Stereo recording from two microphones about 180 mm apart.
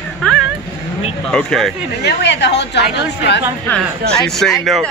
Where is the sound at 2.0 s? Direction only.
75° left (ahead or behind).